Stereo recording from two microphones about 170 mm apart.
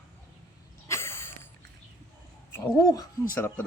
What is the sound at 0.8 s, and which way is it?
Sneeze, 15° left (ahead or behind).